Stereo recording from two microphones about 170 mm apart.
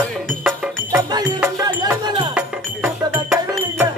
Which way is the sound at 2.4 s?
10° right (ahead or behind).